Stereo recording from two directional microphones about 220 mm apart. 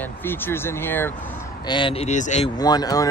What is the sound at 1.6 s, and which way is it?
Speech, 20° left (ahead or behind).